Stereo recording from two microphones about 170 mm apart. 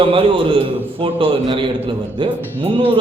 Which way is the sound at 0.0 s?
30° right (ahead or behind).